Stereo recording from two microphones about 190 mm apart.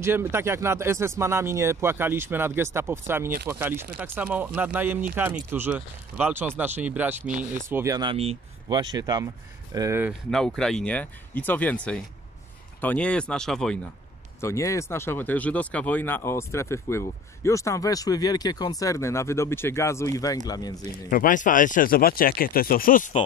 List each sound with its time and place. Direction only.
0.0 s speech: 10° right (ahead or behind)
10.3 s speech: 5° left (ahead or behind)
14.4 s speech: 15° left (ahead or behind)
21.1 s speech: 45° left (ahead or behind)